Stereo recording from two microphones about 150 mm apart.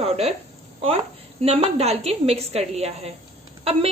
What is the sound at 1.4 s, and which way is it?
A woman's voice, 40° right (ahead or behind).